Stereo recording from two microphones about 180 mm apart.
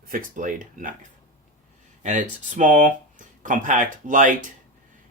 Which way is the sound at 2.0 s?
45° right (ahead or behind).